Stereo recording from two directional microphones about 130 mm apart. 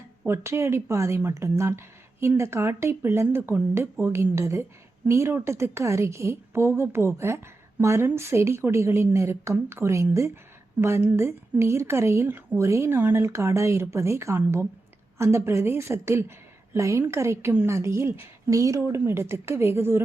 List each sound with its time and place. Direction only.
0.3 s a woman's voice: 20° right (ahead or behind)